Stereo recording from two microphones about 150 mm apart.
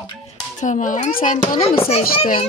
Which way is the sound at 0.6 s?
55° left (ahead or behind).